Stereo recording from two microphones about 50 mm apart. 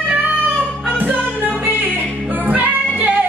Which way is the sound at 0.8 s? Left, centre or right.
Right.